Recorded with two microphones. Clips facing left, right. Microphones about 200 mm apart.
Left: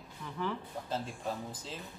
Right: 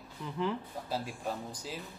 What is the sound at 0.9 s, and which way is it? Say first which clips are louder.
Speech: right 1 dB; centre (ahead or behind).